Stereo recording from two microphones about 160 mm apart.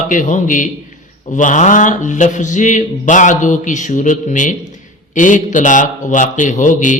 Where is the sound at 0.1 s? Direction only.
50° left (ahead or behind).